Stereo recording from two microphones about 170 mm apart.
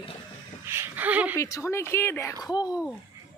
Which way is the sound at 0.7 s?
15° right (ahead or behind).